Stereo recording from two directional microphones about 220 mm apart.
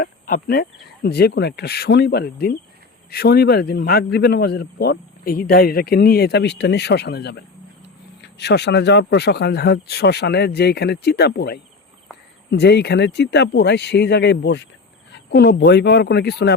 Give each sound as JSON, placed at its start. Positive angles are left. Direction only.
{"t": 0.0, "sound": "a man's voice", "side_deg": 40}